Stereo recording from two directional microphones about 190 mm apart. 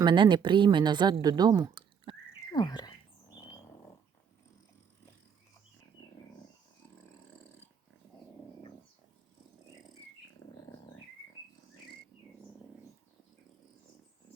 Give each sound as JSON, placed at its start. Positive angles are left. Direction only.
{"t": 0.0, "sound": "a woman's voice", "side_deg": -25}
{"t": 2.5, "sound": "speech", "side_deg": 20}